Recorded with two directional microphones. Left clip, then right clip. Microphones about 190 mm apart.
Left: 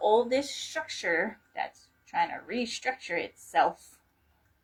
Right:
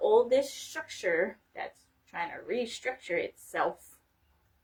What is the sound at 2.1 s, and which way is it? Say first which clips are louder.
Speech: left 4 dB; 15° right (ahead or behind).